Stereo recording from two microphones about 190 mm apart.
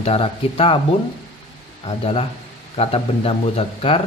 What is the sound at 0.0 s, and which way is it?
Speech, 30° left (ahead or behind).